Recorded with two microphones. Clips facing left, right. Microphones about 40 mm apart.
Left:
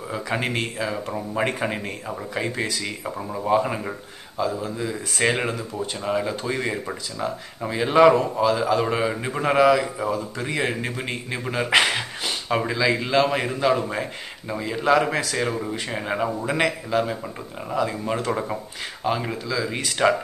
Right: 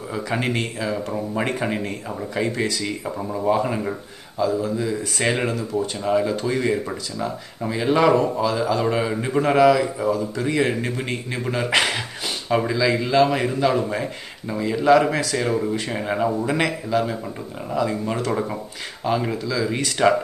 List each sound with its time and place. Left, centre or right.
0.1 s a man's voice: centre
4.4 s a man's voice: centre